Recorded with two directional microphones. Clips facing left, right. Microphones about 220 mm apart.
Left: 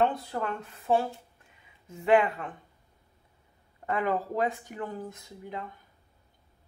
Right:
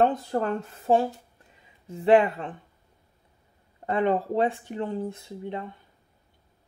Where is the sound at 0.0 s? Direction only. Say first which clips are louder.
Right 4 dB; 35° right (ahead or behind).